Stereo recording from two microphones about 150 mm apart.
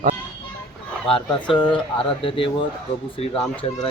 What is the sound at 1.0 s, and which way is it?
Speech, 35° left (ahead or behind).